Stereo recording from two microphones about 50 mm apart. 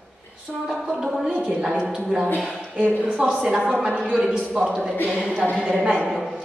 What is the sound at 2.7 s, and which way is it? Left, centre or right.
Speech, right.